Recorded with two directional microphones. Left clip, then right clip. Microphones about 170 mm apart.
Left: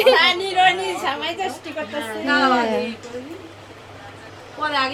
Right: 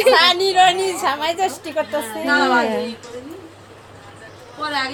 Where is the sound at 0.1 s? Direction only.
40° right (ahead or behind).